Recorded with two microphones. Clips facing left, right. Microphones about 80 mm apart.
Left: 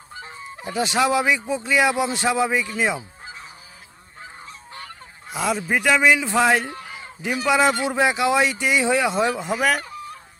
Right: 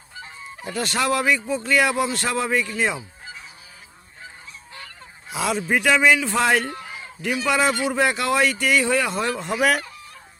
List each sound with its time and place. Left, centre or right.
0.6 s speech: centre
4.4 s goose: left
5.3 s a man's voice: centre
6.0 s speech: centre
6.4 s speech: centre
9.4 s a man's voice: centre